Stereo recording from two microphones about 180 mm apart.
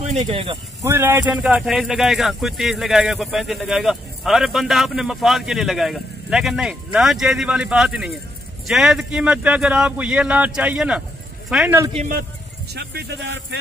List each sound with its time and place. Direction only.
0.0 s speech: 40° right (ahead or behind)
0.8 s speech: 15° right (ahead or behind)
12.7 s speech: 65° right (ahead or behind)